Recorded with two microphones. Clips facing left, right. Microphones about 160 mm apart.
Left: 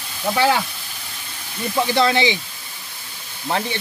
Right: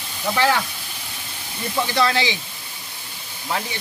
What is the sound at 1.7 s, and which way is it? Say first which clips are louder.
Speech: left 3 dB; 20° left (ahead or behind).